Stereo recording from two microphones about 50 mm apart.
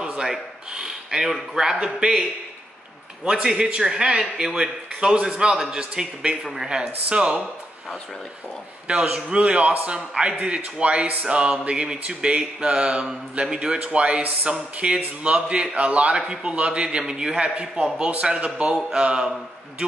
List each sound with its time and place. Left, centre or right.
0.0 s a sound: centre
0.3 s speech: centre
3.4 s a man's voice: centre
6.4 s speech: centre
6.7 s speech: centre
8.8 s a man's voice: centre